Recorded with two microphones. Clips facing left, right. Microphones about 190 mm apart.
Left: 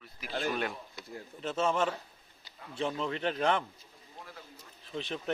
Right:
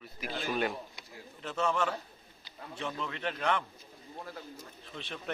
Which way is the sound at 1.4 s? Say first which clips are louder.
Left 2 dB; 25° left (ahead or behind).